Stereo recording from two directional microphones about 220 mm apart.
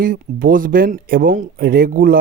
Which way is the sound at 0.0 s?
40° right (ahead or behind).